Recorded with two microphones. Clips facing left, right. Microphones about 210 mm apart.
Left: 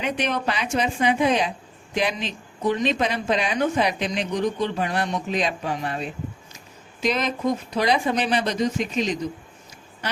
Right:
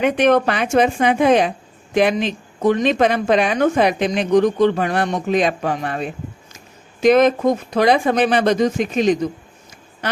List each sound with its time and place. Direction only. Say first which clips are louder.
0.0 s a woman's voice: right 10 dB; 55° right (ahead or behind)